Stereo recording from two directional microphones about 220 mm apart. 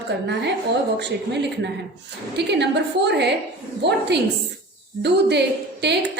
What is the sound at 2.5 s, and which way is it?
Speech, 50° right (ahead or behind).